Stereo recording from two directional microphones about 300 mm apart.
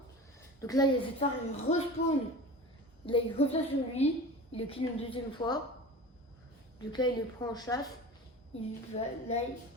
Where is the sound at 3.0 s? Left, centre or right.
Centre.